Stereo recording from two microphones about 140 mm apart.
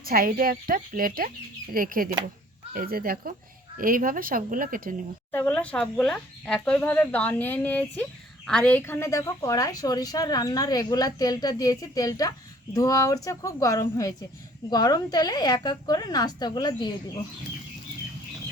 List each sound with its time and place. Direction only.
0.0 s a woman's voice: 90° right
5.3 s speech: 10° left (ahead or behind); by 16.9 s 30° left (ahead or behind)